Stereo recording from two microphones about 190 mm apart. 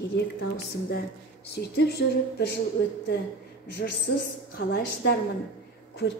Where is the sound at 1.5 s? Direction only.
60° left (ahead or behind).